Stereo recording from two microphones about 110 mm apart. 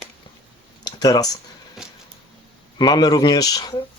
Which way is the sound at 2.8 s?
40° left (ahead or behind).